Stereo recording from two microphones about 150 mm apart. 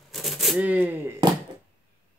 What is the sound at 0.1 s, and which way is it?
Shuffling cards, centre (ahead or behind).